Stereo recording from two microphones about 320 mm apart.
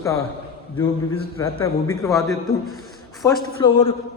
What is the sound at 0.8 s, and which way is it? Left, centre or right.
A man's voice, centre.